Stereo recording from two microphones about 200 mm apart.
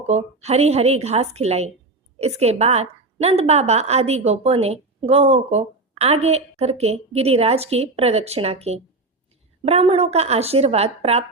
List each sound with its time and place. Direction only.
0.1 s a woman's voice: 30° right (ahead or behind)